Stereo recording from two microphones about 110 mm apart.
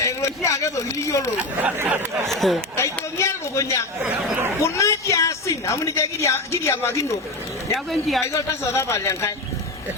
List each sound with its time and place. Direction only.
0.0 s a sound: 30° left (ahead or behind)
1.4 s speech: 15° right (ahead or behind)
2.2 s speech: centre (ahead or behind)
3.2 s a sound: 25° left (ahead or behind)
4.6 s a woman's voice: 25° left (ahead or behind)
7.9 s speech: centre (ahead or behind)
8.3 s speech: 25° left (ahead or behind)